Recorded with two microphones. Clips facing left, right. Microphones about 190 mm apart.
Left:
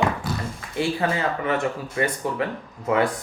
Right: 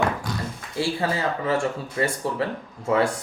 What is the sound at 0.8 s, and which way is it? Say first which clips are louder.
Speech: left 1 dB; 30° right (ahead or behind).